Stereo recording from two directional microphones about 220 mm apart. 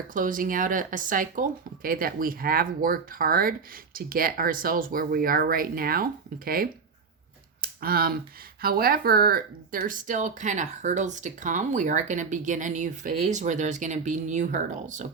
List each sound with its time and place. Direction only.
0.1 s speech: 40° right (ahead or behind)